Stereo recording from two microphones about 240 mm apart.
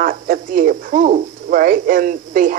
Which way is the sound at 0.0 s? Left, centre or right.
Right.